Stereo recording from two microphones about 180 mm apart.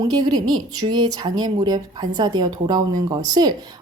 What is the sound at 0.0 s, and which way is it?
Speech, 20° right (ahead or behind).